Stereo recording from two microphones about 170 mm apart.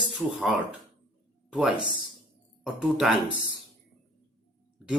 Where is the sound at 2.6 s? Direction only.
5° right (ahead or behind).